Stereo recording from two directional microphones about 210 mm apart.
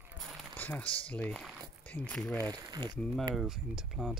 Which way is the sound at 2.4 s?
20° right (ahead or behind).